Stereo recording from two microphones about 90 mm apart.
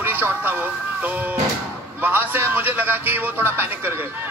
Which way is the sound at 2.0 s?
20° right (ahead or behind).